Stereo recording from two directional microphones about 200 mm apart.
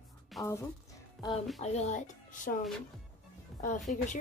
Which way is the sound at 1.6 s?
35° left (ahead or behind).